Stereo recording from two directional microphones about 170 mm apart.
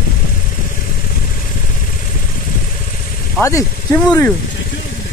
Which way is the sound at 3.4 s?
20° left (ahead or behind).